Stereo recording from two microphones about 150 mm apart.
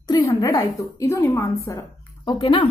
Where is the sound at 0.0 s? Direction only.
25° left (ahead or behind).